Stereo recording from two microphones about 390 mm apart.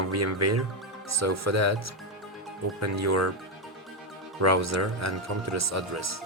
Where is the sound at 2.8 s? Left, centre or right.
Right.